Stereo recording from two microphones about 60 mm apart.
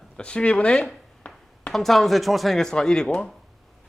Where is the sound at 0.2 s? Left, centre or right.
Centre.